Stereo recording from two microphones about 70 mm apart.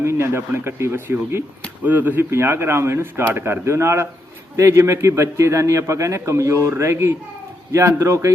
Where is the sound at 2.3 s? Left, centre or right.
Right.